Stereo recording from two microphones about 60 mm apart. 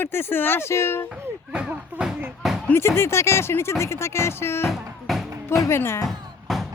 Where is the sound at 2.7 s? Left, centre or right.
Left.